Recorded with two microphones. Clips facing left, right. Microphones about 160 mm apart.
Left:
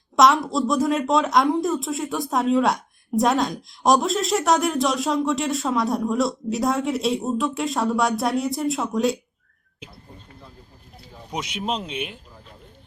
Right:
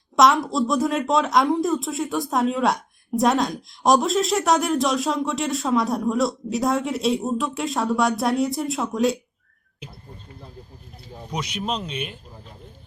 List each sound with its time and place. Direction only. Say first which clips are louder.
0.2 s speech: even; centre (ahead or behind)
11.3 s speech: even; 20° left (ahead or behind)